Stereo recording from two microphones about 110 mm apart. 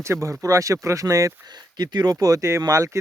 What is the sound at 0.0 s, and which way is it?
Speech, 25° right (ahead or behind).